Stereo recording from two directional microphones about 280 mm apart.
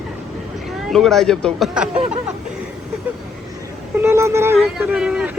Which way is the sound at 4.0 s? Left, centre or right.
Centre.